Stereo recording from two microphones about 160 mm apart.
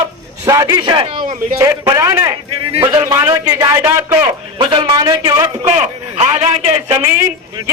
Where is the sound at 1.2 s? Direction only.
55° right (ahead or behind).